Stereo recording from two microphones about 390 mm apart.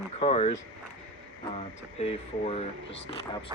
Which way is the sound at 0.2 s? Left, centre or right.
Centre.